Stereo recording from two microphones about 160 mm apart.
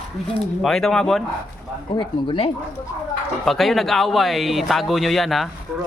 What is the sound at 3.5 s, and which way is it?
Speech, centre (ahead or behind).